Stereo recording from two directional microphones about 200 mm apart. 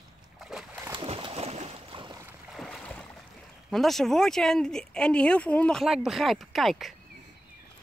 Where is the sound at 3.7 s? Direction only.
Centre (ahead or behind).